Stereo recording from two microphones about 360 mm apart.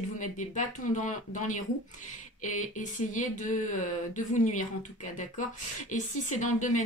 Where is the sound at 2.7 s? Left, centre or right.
Left.